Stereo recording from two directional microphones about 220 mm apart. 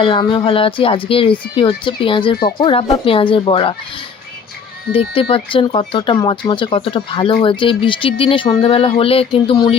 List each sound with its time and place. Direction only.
0.0 s speech: 25° left (ahead or behind)
5.3 s speech: 25° left (ahead or behind)